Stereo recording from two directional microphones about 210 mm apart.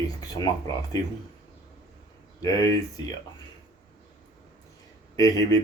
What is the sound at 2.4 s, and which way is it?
Speech, 15° left (ahead or behind).